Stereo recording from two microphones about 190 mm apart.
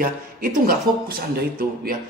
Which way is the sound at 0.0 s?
50° right (ahead or behind).